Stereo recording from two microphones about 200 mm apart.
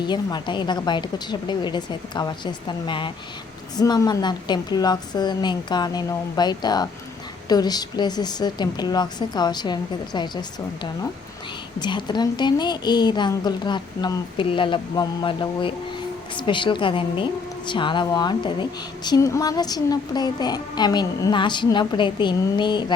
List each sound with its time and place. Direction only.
0.1 s a woman's voice: 20° left (ahead or behind)
11.8 s a woman's voice: 20° left (ahead or behind)